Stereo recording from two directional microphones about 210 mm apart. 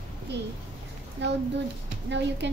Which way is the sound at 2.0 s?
55° right (ahead or behind).